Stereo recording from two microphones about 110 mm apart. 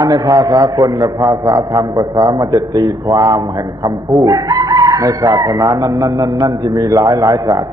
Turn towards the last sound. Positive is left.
turn(degrees=-35)  # may be behind; listen again after turning